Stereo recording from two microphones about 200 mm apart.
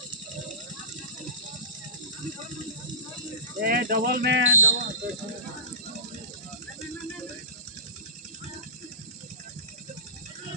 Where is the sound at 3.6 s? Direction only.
45° right (ahead or behind); by 4.7 s 70° right (ahead or behind).